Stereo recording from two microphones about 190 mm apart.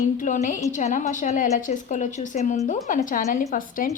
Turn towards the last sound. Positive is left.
turn(degrees=45)  # may be behind; listen again after turning